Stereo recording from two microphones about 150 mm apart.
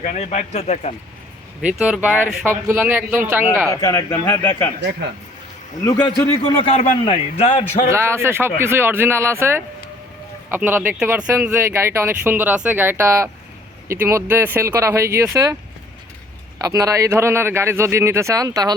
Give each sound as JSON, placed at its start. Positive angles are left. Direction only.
{"t": 0.0, "sound": "speech", "side_deg": 50}
{"t": 1.6, "sound": "speech", "side_deg": -5}
{"t": 3.7, "sound": "speech", "side_deg": 20}
{"t": 5.8, "sound": "a man's voice", "side_deg": 30}
{"t": 7.9, "sound": "speech", "side_deg": -15}
{"t": 16.6, "sound": "a man's voice", "side_deg": -25}